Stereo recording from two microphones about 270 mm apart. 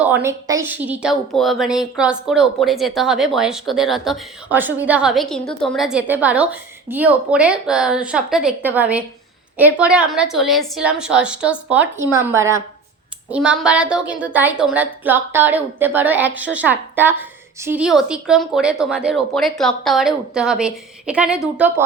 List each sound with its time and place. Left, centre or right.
0.0 s a woman's voice: centre